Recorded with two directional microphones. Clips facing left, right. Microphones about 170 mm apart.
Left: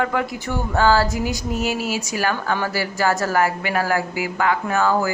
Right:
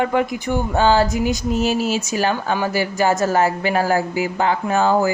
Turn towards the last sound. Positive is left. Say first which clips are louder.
# right 3 dB
turn(degrees=-25)  # may be behind; listen again after turning